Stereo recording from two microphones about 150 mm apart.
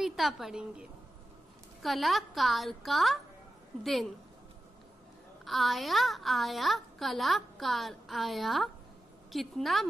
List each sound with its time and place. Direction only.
0.0 s a woman's voice: centre (ahead or behind)
5.4 s a woman's voice: centre (ahead or behind)